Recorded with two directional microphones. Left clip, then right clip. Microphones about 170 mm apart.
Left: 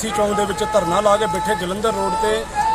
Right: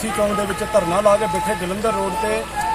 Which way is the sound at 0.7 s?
30° left (ahead or behind).